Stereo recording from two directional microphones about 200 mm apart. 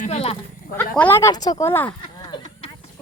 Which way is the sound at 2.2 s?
20° left (ahead or behind).